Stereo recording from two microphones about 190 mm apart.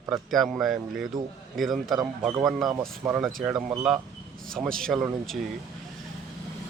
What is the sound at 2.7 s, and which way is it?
Speech, 15° right (ahead or behind).